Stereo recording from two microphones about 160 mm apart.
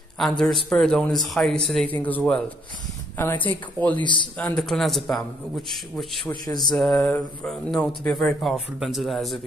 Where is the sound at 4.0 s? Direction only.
30° left (ahead or behind).